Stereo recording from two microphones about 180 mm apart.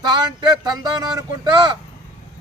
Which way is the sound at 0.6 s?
20° right (ahead or behind).